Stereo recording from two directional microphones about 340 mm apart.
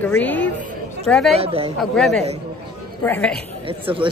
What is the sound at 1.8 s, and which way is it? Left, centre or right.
A woman's voice, centre.